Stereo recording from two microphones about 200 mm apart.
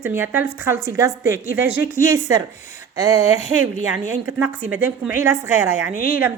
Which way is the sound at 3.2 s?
35° left (ahead or behind).